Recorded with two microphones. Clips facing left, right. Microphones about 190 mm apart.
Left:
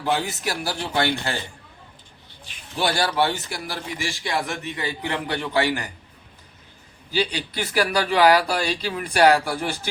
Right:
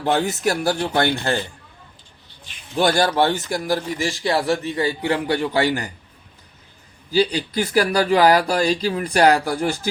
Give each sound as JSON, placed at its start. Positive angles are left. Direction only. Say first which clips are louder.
{"t": 0.0, "sound": "speech", "louder": "right 5 dB", "side_deg": -50}
{"t": 2.7, "sound": "speech", "louder": "right 5 dB", "side_deg": -45}
{"t": 7.1, "sound": "speech", "louder": "right 6 dB", "side_deg": -40}